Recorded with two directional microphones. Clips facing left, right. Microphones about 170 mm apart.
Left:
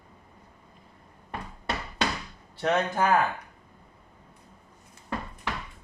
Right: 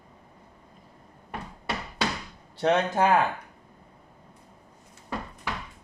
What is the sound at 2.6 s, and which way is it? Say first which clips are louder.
Speech: right 2 dB; 30° right (ahead or behind).